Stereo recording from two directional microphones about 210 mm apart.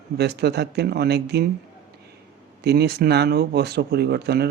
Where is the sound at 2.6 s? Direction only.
50° right (ahead or behind).